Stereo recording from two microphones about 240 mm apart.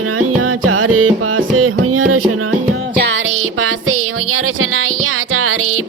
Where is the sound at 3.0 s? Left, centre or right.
Right.